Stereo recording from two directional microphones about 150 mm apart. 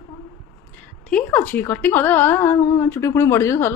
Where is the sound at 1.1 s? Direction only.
10° left (ahead or behind).